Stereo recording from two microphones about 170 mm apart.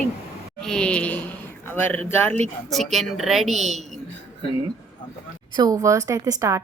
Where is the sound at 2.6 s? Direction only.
Centre (ahead or behind).